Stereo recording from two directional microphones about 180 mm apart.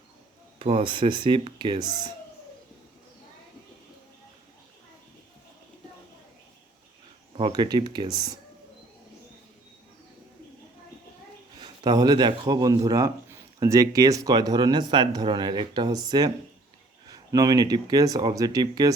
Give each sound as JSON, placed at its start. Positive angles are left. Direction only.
{"t": 0.6, "sound": "speech", "side_deg": -35}
{"t": 7.3, "sound": "speech", "side_deg": -25}
{"t": 11.6, "sound": "speech", "side_deg": -25}